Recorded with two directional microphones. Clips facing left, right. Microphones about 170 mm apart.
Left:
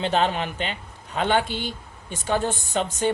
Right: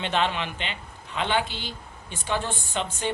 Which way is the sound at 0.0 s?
40° left (ahead or behind).